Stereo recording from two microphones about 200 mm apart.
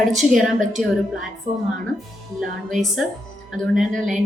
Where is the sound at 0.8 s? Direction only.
40° right (ahead or behind).